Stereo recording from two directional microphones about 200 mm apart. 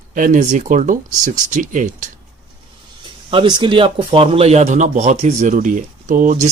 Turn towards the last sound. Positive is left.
turn(degrees=-40)  # may be behind; listen again after turning